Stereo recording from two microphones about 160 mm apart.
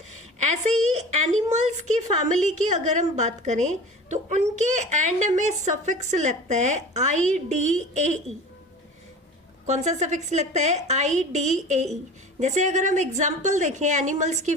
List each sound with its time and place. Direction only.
0.1 s a woman's voice: 45° right (ahead or behind)
9.6 s a woman's voice: 45° right (ahead or behind)